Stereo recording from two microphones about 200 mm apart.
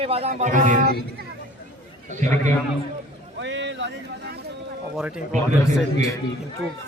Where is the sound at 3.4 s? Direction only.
65° right (ahead or behind).